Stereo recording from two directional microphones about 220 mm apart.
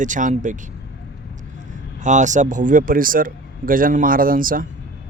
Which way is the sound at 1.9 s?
35° right (ahead or behind).